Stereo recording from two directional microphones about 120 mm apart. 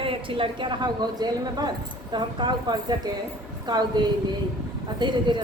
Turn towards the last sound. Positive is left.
turn(degrees=-40)  # may be behind; listen again after turning